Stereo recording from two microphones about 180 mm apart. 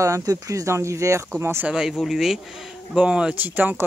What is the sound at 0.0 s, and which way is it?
Speech, 20° right (ahead or behind).